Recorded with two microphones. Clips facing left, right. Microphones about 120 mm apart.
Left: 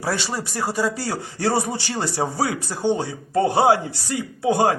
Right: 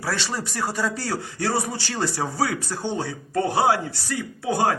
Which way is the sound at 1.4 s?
25° left (ahead or behind).